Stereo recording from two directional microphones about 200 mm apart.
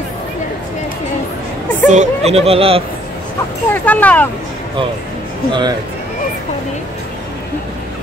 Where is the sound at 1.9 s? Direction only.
35° right (ahead or behind).